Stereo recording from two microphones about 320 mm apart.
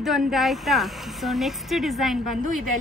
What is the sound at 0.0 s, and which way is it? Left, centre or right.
A woman's voice, centre.